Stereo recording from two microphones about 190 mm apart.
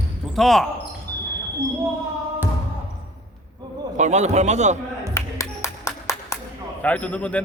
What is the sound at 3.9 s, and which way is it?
Speech, 40° right (ahead or behind).